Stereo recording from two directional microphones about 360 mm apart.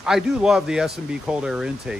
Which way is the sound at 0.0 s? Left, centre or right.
Centre.